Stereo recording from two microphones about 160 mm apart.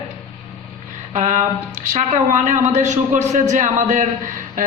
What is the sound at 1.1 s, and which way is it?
A man's voice, 50° right (ahead or behind).